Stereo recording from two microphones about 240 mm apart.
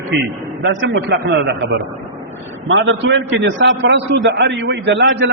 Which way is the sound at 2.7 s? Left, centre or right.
Right.